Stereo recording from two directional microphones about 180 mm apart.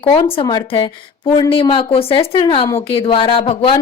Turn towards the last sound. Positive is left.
turn(degrees=30)  # may be behind; listen again after turning